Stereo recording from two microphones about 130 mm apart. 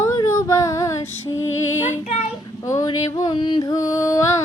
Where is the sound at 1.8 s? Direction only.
65° left (ahead or behind).